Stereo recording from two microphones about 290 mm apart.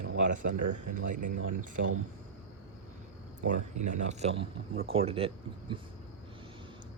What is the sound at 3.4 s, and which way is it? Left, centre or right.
Speech, right.